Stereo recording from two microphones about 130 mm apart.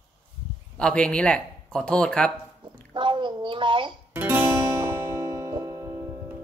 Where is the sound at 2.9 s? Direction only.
40° right (ahead or behind).